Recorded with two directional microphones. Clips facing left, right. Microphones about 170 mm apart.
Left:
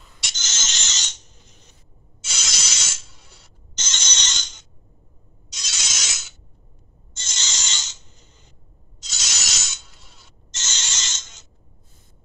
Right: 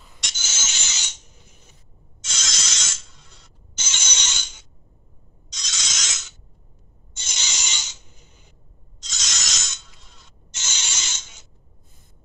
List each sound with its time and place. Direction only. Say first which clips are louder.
0.4 s filing: even; 10° right (ahead or behind)
2.2 s rub: even; 10° left (ahead or behind)
3.7 s a sound: even; 10° right (ahead or behind)
5.5 s mechanisms: even; 5° left (ahead or behind)
7.2 s rub: even; 10° right (ahead or behind)
9.0 s rub: even; 5° left (ahead or behind)
10.5 s mechanisms: even; 10° right (ahead or behind)